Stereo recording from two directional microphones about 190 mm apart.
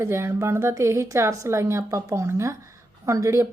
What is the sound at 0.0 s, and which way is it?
A woman's voice, 15° right (ahead or behind).